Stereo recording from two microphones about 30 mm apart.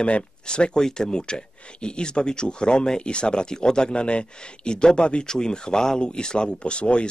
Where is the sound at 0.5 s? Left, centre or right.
Left.